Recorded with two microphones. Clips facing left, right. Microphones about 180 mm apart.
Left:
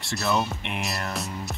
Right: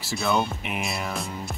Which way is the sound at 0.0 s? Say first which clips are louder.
Right 1 dB; centre (ahead or behind).